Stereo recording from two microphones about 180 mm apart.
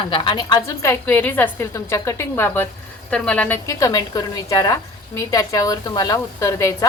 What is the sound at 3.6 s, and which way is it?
Speech, 20° left (ahead or behind).